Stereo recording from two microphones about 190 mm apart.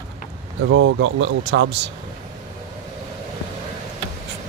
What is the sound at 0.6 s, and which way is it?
Speech, 90° right.